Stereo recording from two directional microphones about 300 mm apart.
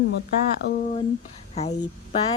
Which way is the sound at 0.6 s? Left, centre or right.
Left.